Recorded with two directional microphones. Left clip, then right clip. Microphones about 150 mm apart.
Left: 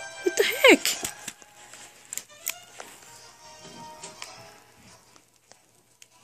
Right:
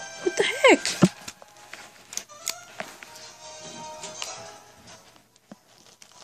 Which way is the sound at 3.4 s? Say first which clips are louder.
Right 4 dB; 60° right (ahead or behind).